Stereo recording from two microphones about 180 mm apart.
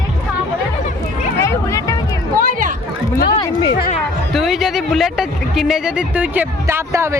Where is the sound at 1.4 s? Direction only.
15° left (ahead or behind).